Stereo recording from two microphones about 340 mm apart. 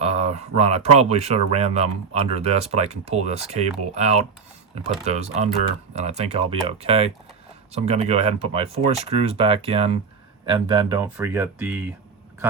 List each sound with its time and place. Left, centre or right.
0.0 s speech: centre